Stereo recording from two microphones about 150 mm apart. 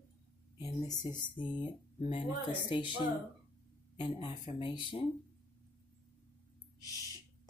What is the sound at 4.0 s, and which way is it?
Speech, 30° left (ahead or behind).